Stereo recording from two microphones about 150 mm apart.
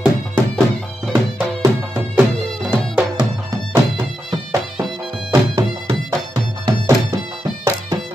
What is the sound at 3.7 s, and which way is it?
Music, 20° right (ahead or behind).